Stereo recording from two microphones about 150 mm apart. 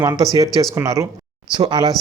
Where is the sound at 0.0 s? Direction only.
25° right (ahead or behind).